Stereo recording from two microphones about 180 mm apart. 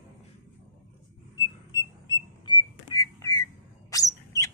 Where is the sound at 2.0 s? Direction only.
25° left (ahead or behind).